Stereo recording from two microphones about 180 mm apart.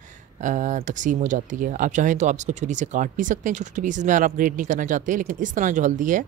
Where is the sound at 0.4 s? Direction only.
45° right (ahead or behind).